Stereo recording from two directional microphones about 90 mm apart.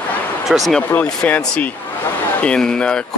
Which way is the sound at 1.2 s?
15° left (ahead or behind).